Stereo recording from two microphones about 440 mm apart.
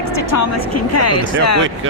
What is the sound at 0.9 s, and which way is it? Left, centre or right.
Speech, left.